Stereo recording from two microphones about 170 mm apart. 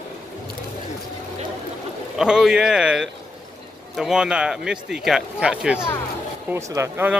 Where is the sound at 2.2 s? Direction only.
5° right (ahead or behind).